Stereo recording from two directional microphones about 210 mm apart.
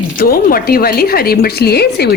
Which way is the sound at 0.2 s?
45° left (ahead or behind).